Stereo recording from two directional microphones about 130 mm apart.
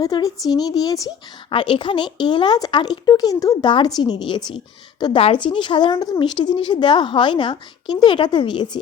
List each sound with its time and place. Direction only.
0.0 s speech: 30° left (ahead or behind)
1.5 s a woman's voice: 40° left (ahead or behind)